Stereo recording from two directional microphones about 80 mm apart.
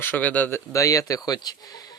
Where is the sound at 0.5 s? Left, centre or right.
Left.